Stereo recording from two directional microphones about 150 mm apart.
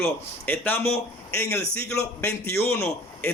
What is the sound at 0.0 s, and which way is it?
A man's voice, 15° left (ahead or behind).